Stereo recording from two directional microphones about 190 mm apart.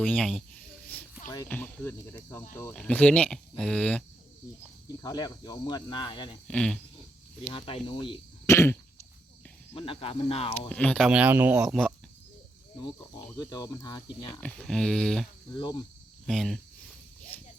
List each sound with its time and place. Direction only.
0.0 s speech: 5° left (ahead or behind)
1.5 s speech: 10° left (ahead or behind)
4.9 s speech: 20° left (ahead or behind)
6.5 s speech: 5° left (ahead or behind)
7.5 s speech: 30° left (ahead or behind)
8.4 s cough: 15° left (ahead or behind)
9.7 s speech: 30° left (ahead or behind)
10.7 s speech: 5° left (ahead or behind)
12.8 s speech: 20° left (ahead or behind)
14.4 s speech: centre (ahead or behind)
15.4 s speech: 25° left (ahead or behind)
16.2 s speech: centre (ahead or behind)